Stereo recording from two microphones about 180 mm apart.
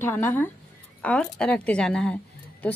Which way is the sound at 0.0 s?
10° left (ahead or behind).